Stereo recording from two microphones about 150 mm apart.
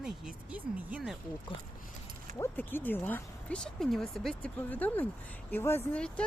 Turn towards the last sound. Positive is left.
turn(degrees=10)  # may be behind; listen again after turning